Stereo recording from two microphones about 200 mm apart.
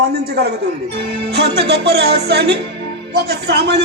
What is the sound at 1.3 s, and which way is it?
A woman's voice, 55° right (ahead or behind).